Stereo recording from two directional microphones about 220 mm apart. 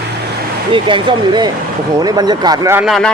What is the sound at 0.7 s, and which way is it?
Speech, 20° right (ahead or behind).